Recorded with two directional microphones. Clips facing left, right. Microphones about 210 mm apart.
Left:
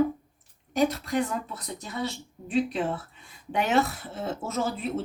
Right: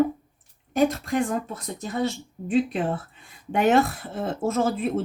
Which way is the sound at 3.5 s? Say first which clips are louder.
Right 5 dB; 50° right (ahead or behind).